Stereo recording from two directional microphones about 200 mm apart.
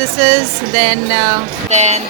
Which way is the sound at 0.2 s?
30° right (ahead or behind).